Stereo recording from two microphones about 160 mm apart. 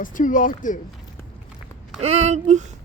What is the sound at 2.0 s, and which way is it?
Speech, 40° right (ahead or behind).